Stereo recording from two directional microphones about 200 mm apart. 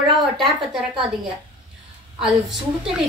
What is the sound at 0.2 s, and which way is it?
Speech, centre (ahead or behind).